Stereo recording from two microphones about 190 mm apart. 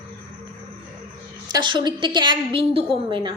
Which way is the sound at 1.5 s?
25° right (ahead or behind).